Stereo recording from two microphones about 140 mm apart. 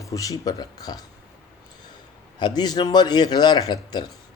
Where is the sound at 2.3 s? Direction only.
30° left (ahead or behind).